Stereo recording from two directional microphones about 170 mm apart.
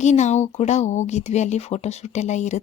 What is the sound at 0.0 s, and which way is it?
A woman's voice, 45° left (ahead or behind).